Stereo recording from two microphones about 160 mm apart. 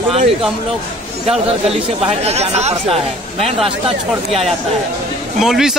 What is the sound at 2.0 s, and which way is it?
Speech, 40° right (ahead or behind).